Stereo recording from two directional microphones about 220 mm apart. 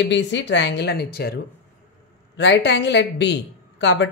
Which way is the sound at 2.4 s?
50° left (ahead or behind).